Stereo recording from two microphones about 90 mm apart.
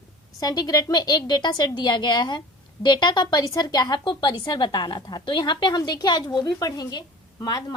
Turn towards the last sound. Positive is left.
turn(degrees=50)  # may be behind; listen again after turning